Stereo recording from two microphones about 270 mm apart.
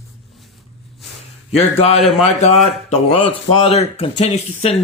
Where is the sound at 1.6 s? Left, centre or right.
Left.